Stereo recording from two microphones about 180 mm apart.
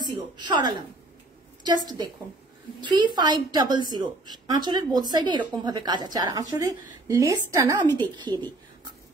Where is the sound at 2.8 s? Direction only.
25° right (ahead or behind).